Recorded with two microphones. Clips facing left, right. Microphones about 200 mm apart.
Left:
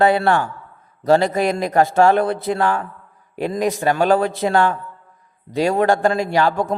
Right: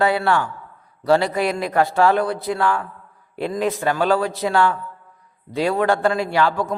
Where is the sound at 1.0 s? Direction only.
45° left (ahead or behind).